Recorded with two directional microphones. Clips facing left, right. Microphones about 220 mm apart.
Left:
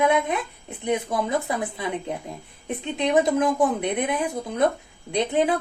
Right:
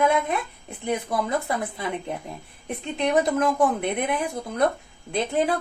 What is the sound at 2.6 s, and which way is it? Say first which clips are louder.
Speech: left 1 dB; 20° left (ahead or behind).